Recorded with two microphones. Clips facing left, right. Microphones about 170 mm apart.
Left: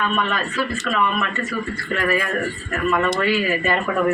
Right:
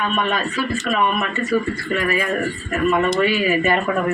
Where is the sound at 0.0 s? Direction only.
15° right (ahead or behind).